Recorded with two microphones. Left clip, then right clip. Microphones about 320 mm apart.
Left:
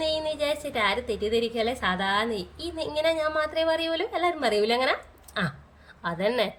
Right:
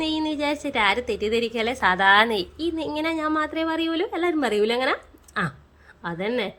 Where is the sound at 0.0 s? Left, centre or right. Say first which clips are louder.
Right 1 dB; centre.